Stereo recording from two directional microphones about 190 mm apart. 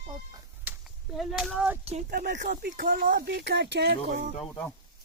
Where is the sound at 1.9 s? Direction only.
40° right (ahead or behind); by 4.0 s 60° right (ahead or behind).